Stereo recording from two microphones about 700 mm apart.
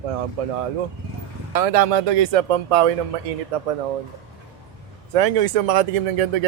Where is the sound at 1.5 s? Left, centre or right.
Right.